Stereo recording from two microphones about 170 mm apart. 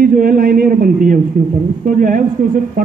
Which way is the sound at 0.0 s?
60° right (ahead or behind).